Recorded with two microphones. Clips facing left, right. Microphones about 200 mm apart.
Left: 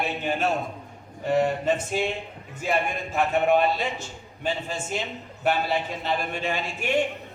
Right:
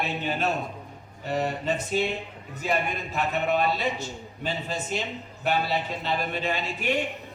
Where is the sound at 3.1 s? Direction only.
50° left (ahead or behind).